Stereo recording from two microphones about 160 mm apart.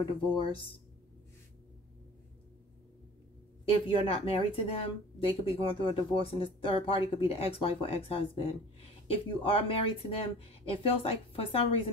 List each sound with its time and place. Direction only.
0.0 s speech: 30° left (ahead or behind)
3.8 s speech: 35° left (ahead or behind)